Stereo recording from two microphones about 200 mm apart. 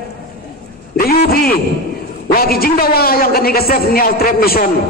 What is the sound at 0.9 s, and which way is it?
A man's voice, 50° left (ahead or behind).